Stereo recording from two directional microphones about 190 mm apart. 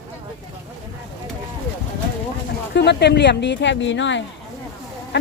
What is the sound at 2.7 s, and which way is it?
Speech, 65° left (ahead or behind).